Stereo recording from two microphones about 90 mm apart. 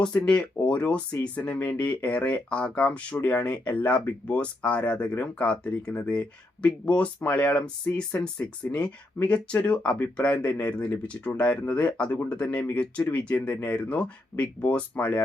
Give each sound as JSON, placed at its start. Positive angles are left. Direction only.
{"t": 0.1, "sound": "speech", "side_deg": 15}